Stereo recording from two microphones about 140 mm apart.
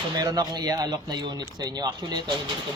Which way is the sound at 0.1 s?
30° right (ahead or behind).